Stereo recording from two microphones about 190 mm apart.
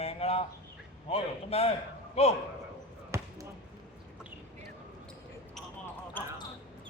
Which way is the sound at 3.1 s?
15° right (ahead or behind).